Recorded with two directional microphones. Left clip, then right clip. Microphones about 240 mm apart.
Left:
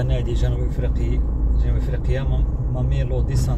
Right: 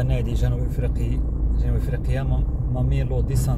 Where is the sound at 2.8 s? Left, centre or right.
Right.